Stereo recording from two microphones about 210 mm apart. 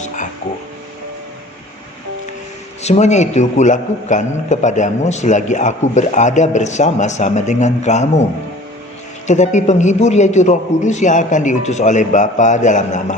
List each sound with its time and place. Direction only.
2.8 s a man's voice: 30° left (ahead or behind)
9.2 s a man's voice: 35° left (ahead or behind)